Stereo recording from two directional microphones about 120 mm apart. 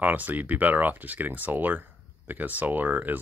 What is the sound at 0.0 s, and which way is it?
Speech, 15° right (ahead or behind).